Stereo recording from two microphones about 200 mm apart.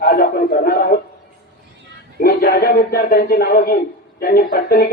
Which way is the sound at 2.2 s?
50° left (ahead or behind).